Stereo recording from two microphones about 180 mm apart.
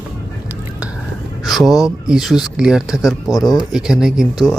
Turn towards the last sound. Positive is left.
turn(degrees=0)  # may be behind; listen again after turning